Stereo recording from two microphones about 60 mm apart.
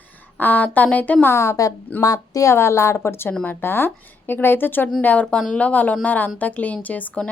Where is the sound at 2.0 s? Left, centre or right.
Left.